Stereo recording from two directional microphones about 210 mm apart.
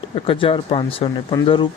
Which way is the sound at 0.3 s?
25° left (ahead or behind).